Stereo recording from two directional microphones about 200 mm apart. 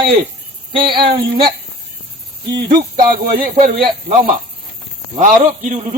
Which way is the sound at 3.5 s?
30° right (ahead or behind).